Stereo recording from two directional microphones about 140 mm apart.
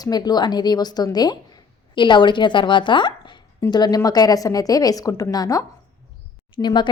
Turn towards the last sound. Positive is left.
turn(degrees=35)  # may be behind; listen again after turning